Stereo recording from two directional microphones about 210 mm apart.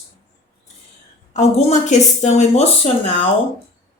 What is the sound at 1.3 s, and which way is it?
Speech, 35° left (ahead or behind).